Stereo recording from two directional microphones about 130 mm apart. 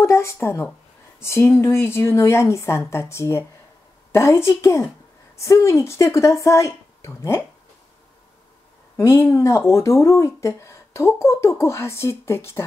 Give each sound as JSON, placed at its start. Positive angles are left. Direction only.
{"t": 0.0, "sound": "speech", "side_deg": 20}
{"t": 8.9, "sound": "speech", "side_deg": 20}